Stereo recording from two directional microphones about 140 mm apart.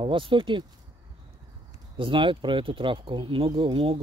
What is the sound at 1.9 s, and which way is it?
Speech, 35° right (ahead or behind).